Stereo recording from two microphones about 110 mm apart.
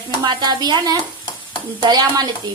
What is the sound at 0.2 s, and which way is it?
A woman's voice, 40° right (ahead or behind).